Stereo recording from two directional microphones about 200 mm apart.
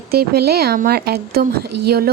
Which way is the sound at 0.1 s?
50° right (ahead or behind).